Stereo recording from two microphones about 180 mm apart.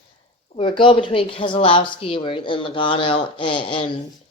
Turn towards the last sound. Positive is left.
turn(degrees=30)  # may be behind; listen again after turning